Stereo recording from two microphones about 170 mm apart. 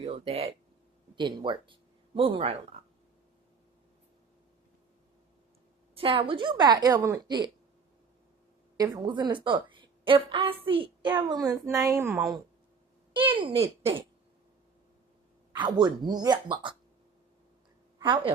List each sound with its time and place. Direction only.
0.0 s a child's voice: 35° right (ahead or behind)
5.9 s a woman's voice: 35° right (ahead or behind)
8.8 s a woman's voice: 25° right (ahead or behind)
13.1 s a child's voice: 30° right (ahead or behind)
15.5 s a woman's voice: 25° right (ahead or behind)
18.0 s a woman's voice: 30° right (ahead or behind)